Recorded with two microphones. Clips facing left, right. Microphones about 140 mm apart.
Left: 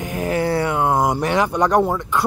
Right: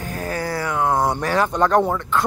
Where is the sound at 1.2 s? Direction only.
15° left (ahead or behind).